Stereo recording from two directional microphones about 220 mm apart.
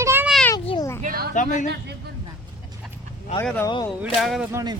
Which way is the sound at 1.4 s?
35° left (ahead or behind).